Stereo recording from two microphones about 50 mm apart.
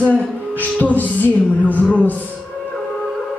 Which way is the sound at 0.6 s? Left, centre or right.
Left.